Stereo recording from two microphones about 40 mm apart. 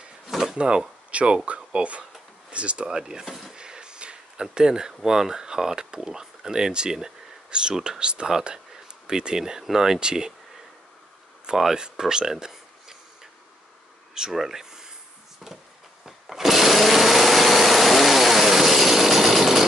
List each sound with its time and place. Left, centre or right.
0.6 s speech: right
3.0 s speech: centre
3.3 s a sound: centre
3.5 s speech: right
8.0 s speech: right
11.7 s speech: centre
14.3 s speech: centre
16.1 s sewing machine: centre